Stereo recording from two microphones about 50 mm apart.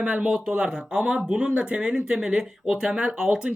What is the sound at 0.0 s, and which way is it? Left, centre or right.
Speech, right.